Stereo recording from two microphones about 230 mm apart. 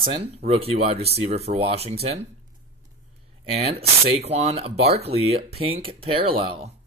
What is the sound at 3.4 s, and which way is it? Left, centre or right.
Speech, right.